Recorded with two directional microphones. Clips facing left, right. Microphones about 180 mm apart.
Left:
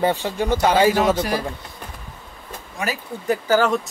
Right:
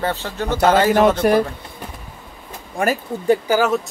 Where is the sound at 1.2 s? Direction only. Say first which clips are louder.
Right 8 dB; 55° right (ahead or behind).